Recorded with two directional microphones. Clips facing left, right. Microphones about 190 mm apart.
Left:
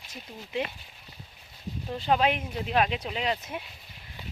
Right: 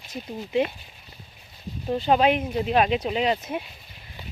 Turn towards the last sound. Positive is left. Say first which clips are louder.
# right 6 dB
turn(degrees=-25)  # may be behind; listen again after turning